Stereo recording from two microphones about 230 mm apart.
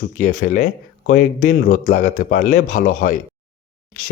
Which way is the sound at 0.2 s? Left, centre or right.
Left.